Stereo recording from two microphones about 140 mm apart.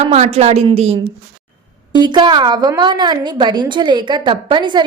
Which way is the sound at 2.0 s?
30° right (ahead or behind).